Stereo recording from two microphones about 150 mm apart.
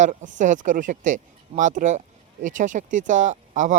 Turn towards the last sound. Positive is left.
turn(degrees=-55)  # may be behind; listen again after turning